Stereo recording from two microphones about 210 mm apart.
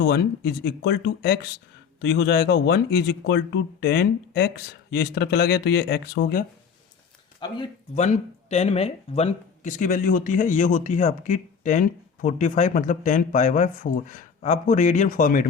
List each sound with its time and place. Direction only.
0.0 s speech: 50° left (ahead or behind)
7.3 s speech: 20° left (ahead or behind)
7.9 s speech: 35° left (ahead or behind)